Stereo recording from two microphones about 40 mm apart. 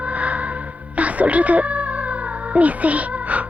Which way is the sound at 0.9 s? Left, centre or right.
Right.